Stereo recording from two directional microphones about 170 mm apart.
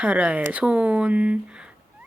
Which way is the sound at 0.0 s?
5° right (ahead or behind).